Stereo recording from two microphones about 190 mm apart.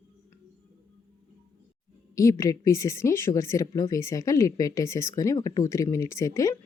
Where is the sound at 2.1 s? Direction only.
15° left (ahead or behind).